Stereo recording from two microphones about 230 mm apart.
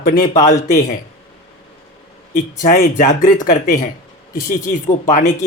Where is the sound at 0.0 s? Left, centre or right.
Left.